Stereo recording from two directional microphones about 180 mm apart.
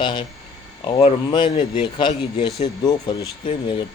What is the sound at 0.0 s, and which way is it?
Speech, 25° left (ahead or behind).